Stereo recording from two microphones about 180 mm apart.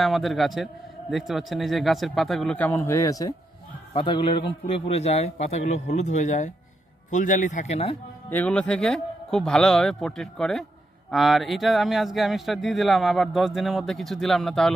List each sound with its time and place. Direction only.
0.0 s a man's voice: centre (ahead or behind); by 8.0 s 35° left (ahead or behind)
8.3 s speech: 10° left (ahead or behind)